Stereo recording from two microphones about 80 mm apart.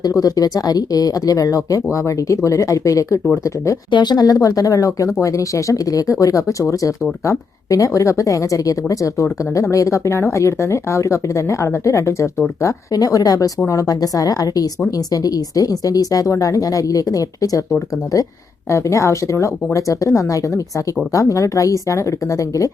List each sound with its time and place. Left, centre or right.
0.0 s a woman's voice: left
3.9 s a woman's voice: left
18.7 s a woman's voice: left